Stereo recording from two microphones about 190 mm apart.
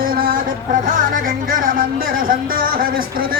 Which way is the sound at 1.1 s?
50° right (ahead or behind).